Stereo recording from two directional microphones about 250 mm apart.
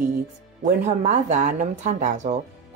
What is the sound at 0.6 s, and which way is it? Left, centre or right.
Speech, right.